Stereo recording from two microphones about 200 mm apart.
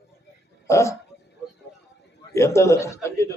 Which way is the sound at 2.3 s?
15° left (ahead or behind).